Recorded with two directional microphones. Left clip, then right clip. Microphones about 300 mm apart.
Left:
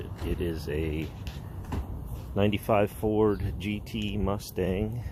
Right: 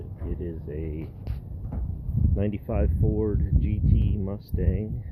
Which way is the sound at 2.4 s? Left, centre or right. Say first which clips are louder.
Left 6 dB; centre.